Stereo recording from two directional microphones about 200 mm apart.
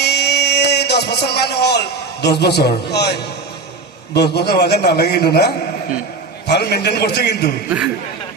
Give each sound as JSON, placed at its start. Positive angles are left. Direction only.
{"t": 0.0, "sound": "a man's voice", "side_deg": 55}
{"t": 6.5, "sound": "a man's voice", "side_deg": 55}